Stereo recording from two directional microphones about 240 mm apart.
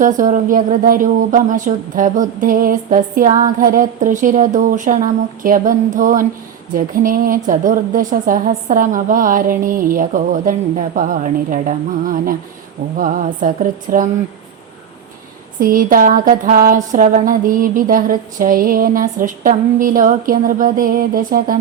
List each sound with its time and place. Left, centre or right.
0.0 s speech: right
15.6 s speech: right